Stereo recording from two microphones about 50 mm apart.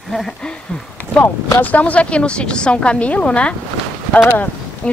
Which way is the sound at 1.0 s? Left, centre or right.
Left.